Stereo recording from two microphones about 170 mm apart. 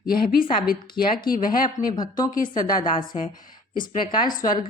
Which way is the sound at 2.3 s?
55° left (ahead or behind).